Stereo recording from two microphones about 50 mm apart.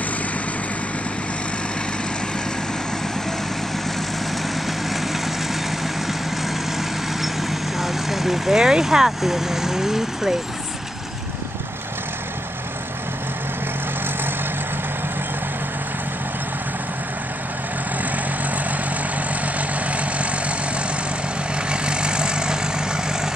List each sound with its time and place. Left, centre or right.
7.8 s speech: centre
19.4 s vehicle: right
21.6 s vehicle: centre